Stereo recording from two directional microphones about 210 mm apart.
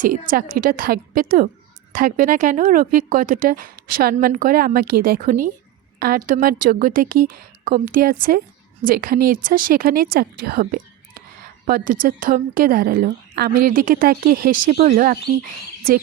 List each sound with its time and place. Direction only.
0.0 s a woman's voice: 40° right (ahead or behind)